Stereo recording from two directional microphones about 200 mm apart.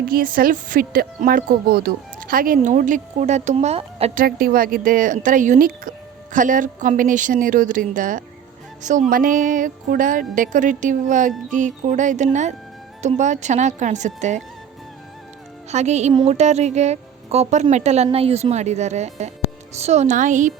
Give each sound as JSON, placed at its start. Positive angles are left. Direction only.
{"t": 0.1, "sound": "speech", "side_deg": -45}
{"t": 4.1, "sound": "a woman's voice", "side_deg": -45}
{"t": 15.7, "sound": "speech", "side_deg": -35}